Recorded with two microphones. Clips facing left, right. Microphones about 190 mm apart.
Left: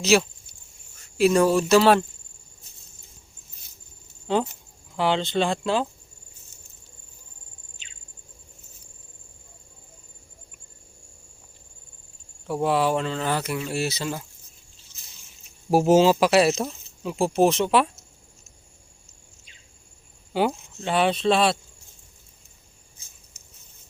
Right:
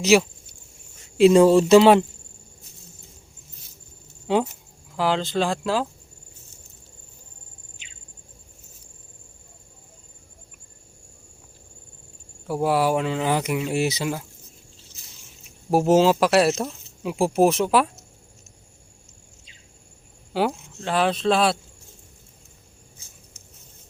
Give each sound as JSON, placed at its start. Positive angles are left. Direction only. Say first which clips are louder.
{"t": 0.0, "sound": "speech", "louder": "right 3 dB", "side_deg": -15}
{"t": 4.9, "sound": "speech", "louder": "even", "side_deg": 0}
{"t": 12.5, "sound": "speech", "louder": "right 1 dB", "side_deg": -5}
{"t": 15.7, "sound": "speech", "louder": "even", "side_deg": 0}
{"t": 20.3, "sound": "speech", "louder": "even", "side_deg": 0}
{"t": 23.3, "sound": "a sound", "louder": "right 4 dB", "side_deg": 10}